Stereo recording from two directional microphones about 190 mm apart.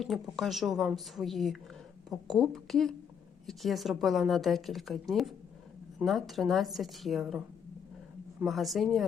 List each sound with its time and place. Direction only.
0.0 s a woman's voice: centre (ahead or behind)